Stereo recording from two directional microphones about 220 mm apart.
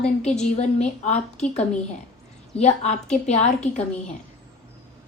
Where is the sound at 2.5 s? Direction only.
30° left (ahead or behind).